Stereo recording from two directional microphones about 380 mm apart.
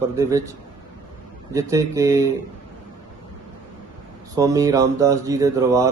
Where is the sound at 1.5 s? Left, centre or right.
Centre.